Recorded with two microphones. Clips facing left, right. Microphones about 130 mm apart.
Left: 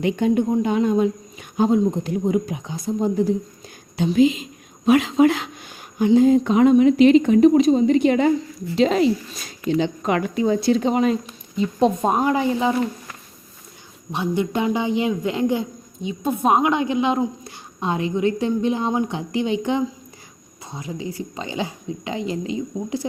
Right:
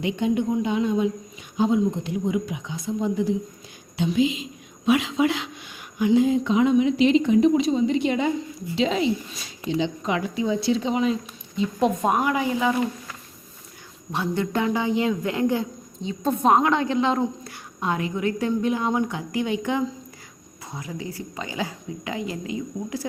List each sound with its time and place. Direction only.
0.0 s speech: 45° left (ahead or behind)
11.8 s a woman's voice: 30° left (ahead or behind)
14.1 s a man's voice: 20° left (ahead or behind)